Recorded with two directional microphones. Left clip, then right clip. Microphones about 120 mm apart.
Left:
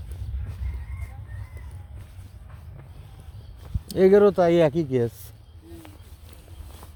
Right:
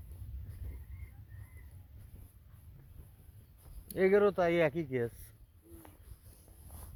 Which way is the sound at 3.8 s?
40° left (ahead or behind).